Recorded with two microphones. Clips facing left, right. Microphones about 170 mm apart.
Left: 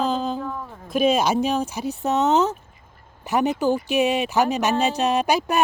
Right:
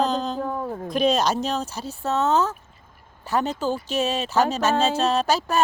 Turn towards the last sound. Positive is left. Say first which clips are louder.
# left 1 dB
turn(degrees=15)  # may be behind; listen again after turning